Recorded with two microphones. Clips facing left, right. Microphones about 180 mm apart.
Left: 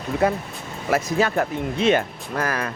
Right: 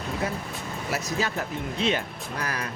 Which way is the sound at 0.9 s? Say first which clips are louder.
Left 8 dB; 55° left (ahead or behind).